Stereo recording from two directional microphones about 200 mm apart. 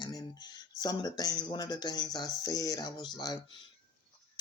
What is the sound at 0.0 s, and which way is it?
Speech, 20° left (ahead or behind).